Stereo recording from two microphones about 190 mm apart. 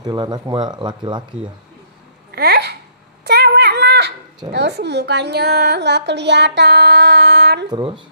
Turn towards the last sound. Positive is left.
turn(degrees=-25)  # may be behind; listen again after turning